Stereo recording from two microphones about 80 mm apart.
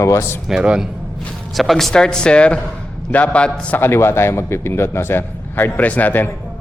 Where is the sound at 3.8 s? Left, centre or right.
Left.